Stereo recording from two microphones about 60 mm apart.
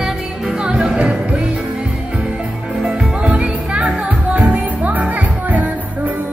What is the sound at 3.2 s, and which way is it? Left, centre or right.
Music, centre.